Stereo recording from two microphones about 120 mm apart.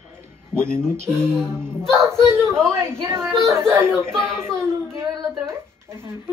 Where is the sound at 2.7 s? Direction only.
20° right (ahead or behind).